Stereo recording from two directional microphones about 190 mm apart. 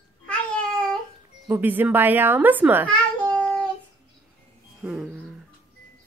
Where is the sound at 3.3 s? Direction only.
5° left (ahead or behind).